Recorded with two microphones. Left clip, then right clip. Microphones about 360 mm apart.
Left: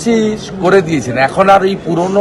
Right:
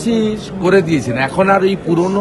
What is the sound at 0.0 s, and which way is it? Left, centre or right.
A man's voice, centre.